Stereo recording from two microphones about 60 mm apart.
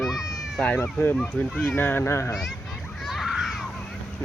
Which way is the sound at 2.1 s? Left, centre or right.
Left.